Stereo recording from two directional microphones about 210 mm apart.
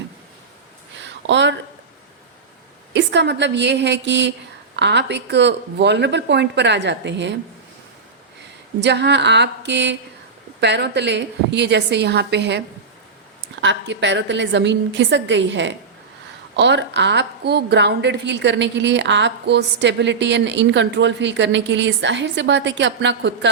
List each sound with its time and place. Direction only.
0.9 s a sound: 60° right (ahead or behind)
2.9 s a woman's voice: 55° right (ahead or behind)
8.8 s a woman's voice: 55° right (ahead or behind)